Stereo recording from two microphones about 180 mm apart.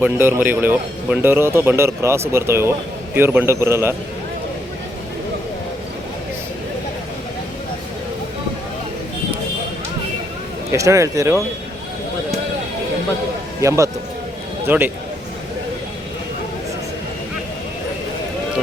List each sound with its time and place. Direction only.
0.0 s speech: 10° right (ahead or behind)
10.7 s speech: 15° right (ahead or behind)
13.6 s speech: 15° right (ahead or behind)